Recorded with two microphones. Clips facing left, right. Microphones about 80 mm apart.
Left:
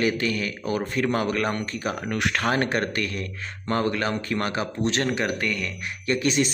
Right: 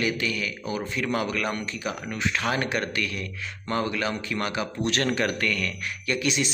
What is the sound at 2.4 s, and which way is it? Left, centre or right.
Speech, left.